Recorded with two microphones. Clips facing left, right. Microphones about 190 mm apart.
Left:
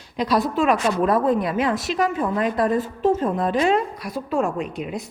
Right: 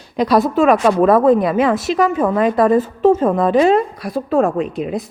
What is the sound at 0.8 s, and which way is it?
Speech, 65° right (ahead or behind).